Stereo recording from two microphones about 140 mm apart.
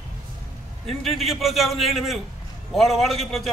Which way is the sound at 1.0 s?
Centre (ahead or behind).